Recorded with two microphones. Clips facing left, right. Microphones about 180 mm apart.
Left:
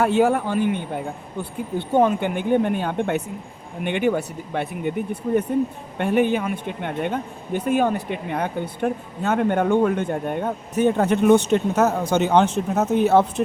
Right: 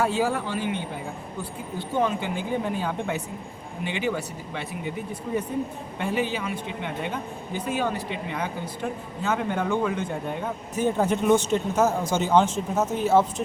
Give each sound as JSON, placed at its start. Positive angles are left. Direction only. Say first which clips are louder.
{"t": 0.0, "sound": "speech", "louder": "left 6 dB", "side_deg": 60}